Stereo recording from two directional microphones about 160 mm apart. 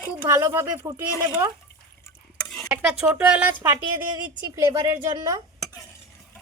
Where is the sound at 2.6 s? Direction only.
10° right (ahead or behind).